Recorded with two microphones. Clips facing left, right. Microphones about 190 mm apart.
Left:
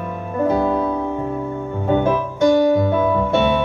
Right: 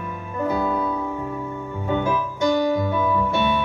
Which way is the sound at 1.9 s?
60° left (ahead or behind).